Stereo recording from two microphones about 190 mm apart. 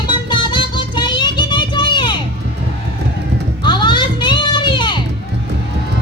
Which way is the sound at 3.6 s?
25° left (ahead or behind).